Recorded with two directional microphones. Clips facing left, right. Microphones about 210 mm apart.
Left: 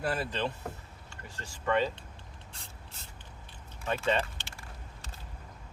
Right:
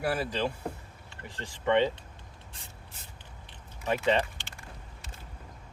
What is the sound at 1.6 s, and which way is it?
Speech, 20° right (ahead or behind).